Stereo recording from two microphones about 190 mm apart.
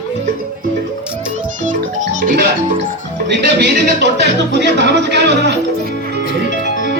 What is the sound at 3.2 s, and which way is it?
Speech, 65° right (ahead or behind).